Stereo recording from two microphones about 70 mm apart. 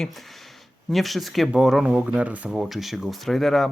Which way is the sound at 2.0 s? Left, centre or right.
Right.